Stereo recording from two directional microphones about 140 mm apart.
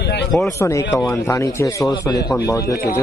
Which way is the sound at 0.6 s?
20° left (ahead or behind).